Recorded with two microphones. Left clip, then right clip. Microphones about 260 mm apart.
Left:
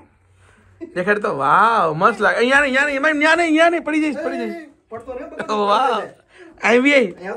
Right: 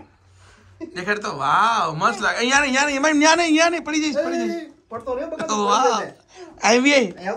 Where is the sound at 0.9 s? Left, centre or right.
Centre.